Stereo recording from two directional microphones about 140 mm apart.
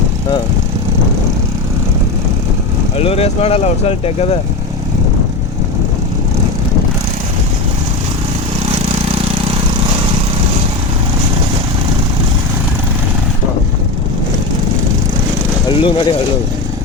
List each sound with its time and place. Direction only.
3.0 s speech: 45° left (ahead or behind)
15.7 s speech: 40° left (ahead or behind)